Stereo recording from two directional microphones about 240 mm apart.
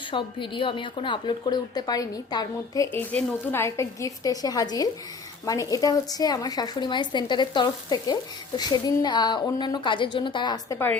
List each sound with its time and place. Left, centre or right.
0.1 s a woman's voice: centre